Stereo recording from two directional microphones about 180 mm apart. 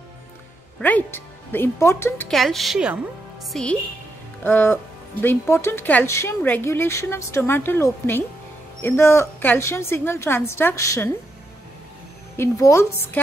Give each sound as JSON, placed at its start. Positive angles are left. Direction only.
{"t": 0.7, "sound": "a woman's voice", "side_deg": 10}
{"t": 12.4, "sound": "speech", "side_deg": 15}